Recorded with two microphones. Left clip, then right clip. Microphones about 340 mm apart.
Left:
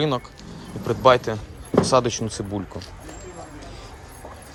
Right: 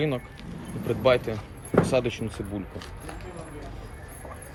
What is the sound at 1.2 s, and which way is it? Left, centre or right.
Speech, left.